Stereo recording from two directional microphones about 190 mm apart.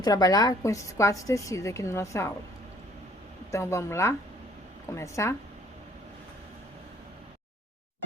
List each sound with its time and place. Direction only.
0.0 s a woman's voice: 20° left (ahead or behind)
3.5 s a woman's voice: 15° left (ahead or behind)